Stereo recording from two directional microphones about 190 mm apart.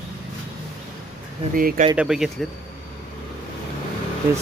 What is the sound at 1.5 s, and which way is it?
Speech, 45° right (ahead or behind).